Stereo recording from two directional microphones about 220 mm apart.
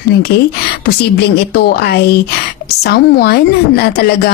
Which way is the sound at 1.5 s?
45° left (ahead or behind).